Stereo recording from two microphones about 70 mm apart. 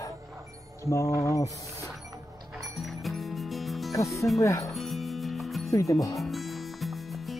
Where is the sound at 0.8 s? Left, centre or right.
Left.